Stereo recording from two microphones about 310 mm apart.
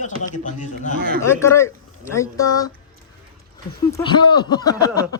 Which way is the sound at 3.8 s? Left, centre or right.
Centre.